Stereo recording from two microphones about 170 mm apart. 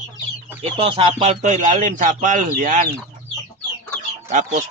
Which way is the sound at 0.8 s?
30° right (ahead or behind).